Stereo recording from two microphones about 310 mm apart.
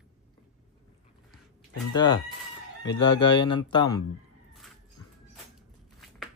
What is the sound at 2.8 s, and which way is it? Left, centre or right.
Speech, centre.